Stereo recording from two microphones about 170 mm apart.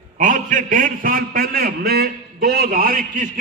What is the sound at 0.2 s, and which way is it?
A man's voice, 50° right (ahead or behind).